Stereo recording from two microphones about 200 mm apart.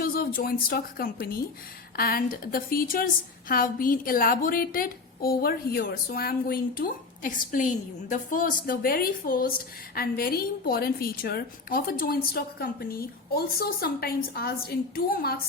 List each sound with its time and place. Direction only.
0.0 s a woman's voice: 50° left (ahead or behind)